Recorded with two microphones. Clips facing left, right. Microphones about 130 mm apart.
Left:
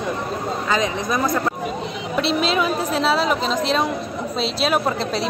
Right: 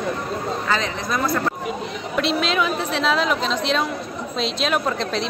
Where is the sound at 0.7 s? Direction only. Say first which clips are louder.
Left 4 dB; 15° left (ahead or behind).